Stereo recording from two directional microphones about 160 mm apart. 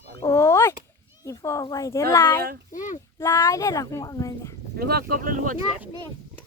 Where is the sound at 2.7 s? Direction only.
50° left (ahead or behind).